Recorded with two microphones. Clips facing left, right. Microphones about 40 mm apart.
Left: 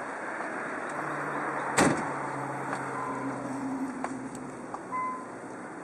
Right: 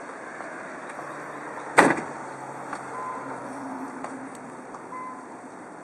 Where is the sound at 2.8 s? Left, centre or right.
Centre.